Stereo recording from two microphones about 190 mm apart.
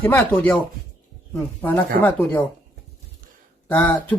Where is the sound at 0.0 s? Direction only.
10° left (ahead or behind).